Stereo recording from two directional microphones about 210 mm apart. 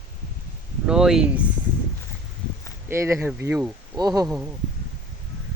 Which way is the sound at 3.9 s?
20° right (ahead or behind).